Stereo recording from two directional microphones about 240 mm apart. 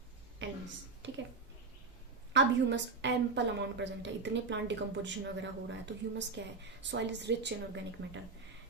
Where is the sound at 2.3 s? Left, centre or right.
Right.